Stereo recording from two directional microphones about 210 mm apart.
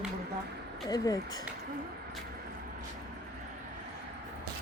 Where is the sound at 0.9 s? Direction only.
15° left (ahead or behind).